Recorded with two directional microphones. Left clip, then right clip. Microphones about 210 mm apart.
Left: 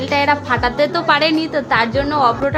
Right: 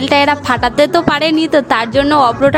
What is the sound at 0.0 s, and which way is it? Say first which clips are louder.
A woman's voice: right 4 dB; 50° right (ahead or behind).